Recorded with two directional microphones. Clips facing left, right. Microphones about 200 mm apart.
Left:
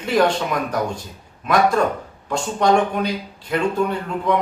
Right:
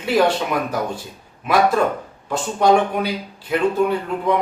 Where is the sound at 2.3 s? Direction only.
5° right (ahead or behind).